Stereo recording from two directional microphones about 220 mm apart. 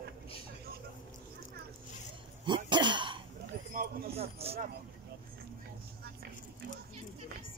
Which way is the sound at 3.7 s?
40° right (ahead or behind).